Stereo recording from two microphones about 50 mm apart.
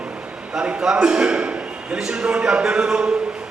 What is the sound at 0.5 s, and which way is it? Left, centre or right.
A man's voice, centre.